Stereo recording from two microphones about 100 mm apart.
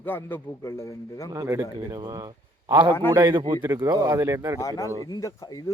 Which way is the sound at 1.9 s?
40° right (ahead or behind).